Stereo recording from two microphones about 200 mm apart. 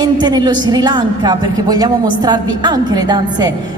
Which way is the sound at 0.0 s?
20° right (ahead or behind).